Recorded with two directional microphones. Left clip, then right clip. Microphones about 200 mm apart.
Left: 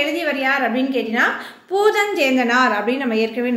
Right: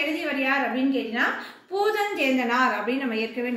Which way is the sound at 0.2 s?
45° left (ahead or behind).